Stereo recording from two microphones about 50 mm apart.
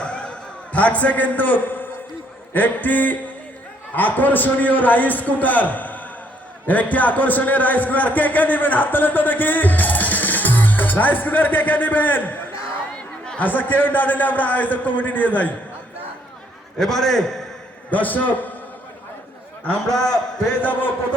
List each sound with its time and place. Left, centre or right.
0.0 s a sound: left
2.5 s a man's voice: left
16.7 s a man's voice: centre
17.9 s a man's voice: left
20.0 s a man's voice: centre
20.6 s a man's voice: left